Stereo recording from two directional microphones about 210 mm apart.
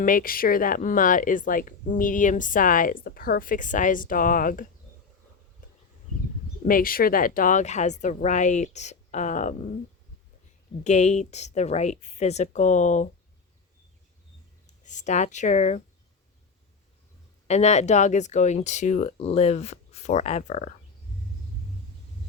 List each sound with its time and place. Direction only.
0.0 s speech: 40° left (ahead or behind)
6.7 s speech: 40° left (ahead or behind)
10.8 s speech: 35° left (ahead or behind)
14.8 s speech: 35° left (ahead or behind)
17.5 s speech: 30° left (ahead or behind)